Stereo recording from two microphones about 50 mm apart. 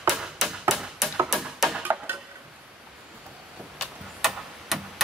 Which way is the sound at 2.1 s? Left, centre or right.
Right.